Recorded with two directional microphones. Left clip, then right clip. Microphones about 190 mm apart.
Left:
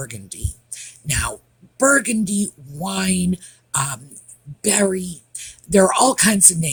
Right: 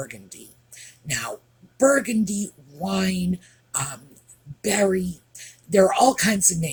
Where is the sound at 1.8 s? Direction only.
50° left (ahead or behind).